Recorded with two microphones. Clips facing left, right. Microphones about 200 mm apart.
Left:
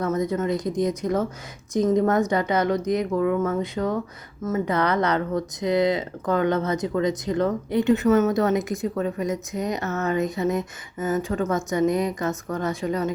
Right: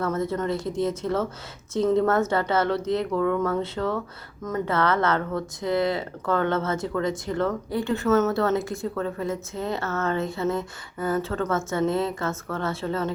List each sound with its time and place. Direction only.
0.0 s speech: 15° left (ahead or behind)